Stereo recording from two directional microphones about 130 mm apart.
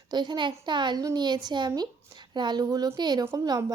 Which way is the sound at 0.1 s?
35° right (ahead or behind).